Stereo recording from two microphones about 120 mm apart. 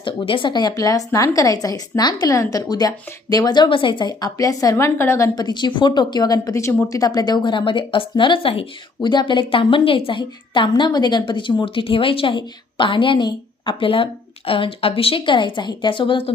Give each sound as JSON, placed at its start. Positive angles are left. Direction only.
{"t": 0.0, "sound": "a woman's voice", "side_deg": 45}